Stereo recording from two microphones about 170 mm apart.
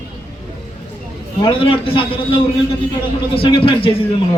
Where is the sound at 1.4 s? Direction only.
30° left (ahead or behind).